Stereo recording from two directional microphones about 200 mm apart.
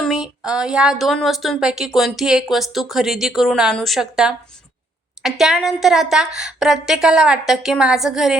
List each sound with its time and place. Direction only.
0.0 s a woman's voice: 5° right (ahead or behind)